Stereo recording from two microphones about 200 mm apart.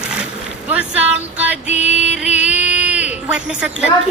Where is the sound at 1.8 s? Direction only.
5° right (ahead or behind).